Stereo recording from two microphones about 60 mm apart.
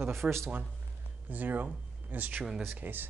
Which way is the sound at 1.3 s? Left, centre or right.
Right.